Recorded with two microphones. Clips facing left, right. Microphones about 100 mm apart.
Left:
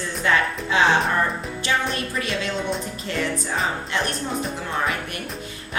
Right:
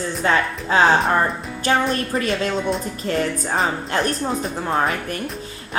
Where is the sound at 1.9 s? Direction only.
45° right (ahead or behind).